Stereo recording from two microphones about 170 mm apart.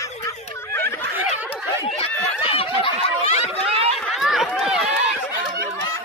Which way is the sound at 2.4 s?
30° left (ahead or behind).